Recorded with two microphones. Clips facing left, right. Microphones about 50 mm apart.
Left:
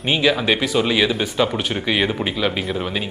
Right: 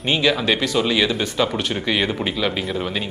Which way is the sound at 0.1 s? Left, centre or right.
Centre.